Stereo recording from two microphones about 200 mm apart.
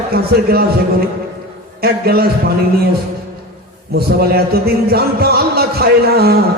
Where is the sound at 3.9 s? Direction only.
50° right (ahead or behind).